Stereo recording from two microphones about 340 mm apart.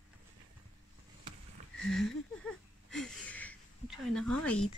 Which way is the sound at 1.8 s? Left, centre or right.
Centre.